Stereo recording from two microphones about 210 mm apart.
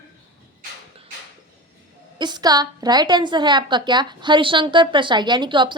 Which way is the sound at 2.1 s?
20° right (ahead or behind).